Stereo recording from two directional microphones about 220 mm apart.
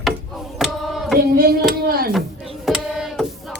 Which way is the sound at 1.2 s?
45° right (ahead or behind).